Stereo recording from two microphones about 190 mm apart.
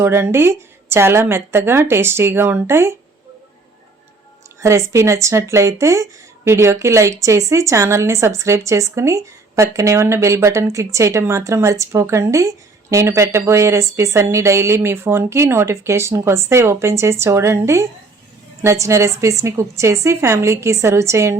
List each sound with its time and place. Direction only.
0.0 s speech: 10° right (ahead or behind)
4.6 s speech: 15° right (ahead or behind)